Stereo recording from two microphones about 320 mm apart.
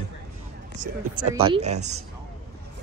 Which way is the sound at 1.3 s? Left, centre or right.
Centre.